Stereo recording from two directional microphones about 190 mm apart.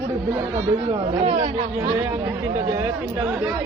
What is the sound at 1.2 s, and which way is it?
Speech, 30° right (ahead or behind).